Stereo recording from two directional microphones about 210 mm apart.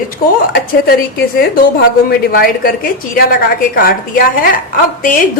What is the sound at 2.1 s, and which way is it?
A woman's voice, 45° left (ahead or behind).